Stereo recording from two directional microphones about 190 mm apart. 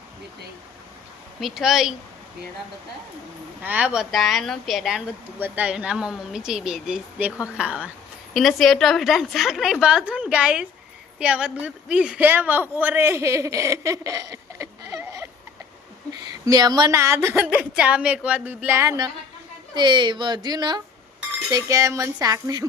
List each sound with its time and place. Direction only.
1.4 s speech: centre (ahead or behind)
3.6 s a woman's voice: 10° right (ahead or behind)
16.5 s a woman's voice: 20° right (ahead or behind)